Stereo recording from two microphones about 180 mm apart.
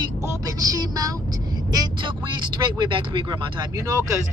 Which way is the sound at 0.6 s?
20° right (ahead or behind).